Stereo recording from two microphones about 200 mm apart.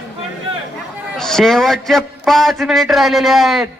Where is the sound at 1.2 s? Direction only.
Centre (ahead or behind).